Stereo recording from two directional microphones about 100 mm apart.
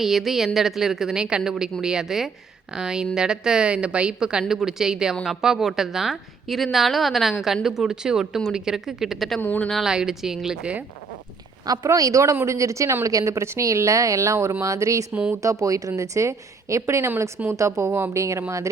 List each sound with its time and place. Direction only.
0.0 s a woman's voice: centre (ahead or behind)
9.4 s speech: 15° left (ahead or behind)
9.6 s a woman's voice: 5° left (ahead or behind)
11.6 s a woman's voice: 40° right (ahead or behind)
15.1 s a woman's voice: 15° right (ahead or behind)
15.4 s a woman's voice: 35° right (ahead or behind)